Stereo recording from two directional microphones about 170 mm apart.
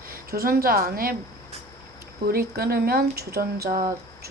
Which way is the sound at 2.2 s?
60° right (ahead or behind).